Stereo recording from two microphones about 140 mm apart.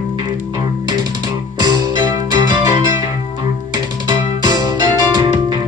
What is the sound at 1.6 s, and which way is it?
Music, 30° right (ahead or behind).